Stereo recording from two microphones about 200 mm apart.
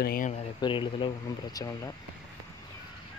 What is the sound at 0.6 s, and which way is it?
Speech, 25° left (ahead or behind).